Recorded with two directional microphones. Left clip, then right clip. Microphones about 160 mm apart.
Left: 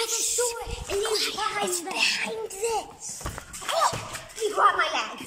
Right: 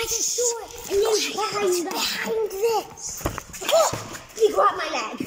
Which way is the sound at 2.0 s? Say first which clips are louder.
Right 1 dB; centre (ahead or behind).